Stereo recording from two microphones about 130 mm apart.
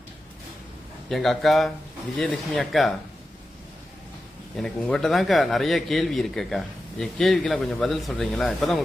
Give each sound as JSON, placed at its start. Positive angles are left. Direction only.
{"t": 1.1, "sound": "a man's voice", "side_deg": 0}
{"t": 4.5, "sound": "a man's voice", "side_deg": 5}